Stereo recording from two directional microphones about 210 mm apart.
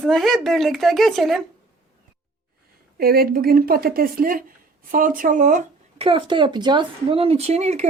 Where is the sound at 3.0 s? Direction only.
45° right (ahead or behind).